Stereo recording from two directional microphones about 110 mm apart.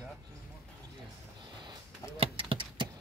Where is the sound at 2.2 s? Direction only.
55° right (ahead or behind).